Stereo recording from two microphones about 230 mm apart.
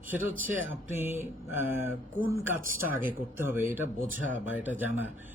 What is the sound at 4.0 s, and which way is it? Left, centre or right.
Speech, right.